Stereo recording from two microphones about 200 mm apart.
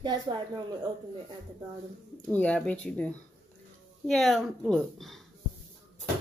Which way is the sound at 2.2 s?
5° left (ahead or behind).